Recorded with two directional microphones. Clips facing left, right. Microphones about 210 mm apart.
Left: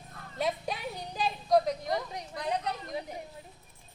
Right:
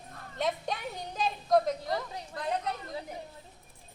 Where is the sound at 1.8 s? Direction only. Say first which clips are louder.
Left 1 dB; 15° left (ahead or behind).